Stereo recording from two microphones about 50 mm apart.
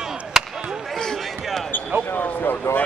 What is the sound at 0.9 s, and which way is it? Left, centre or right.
Basketball bounce, centre.